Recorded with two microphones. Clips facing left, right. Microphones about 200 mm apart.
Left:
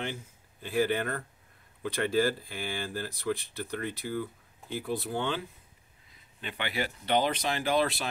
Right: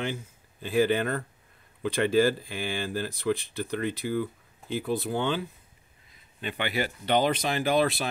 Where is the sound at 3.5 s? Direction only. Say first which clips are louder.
Right 5 dB; 90° right.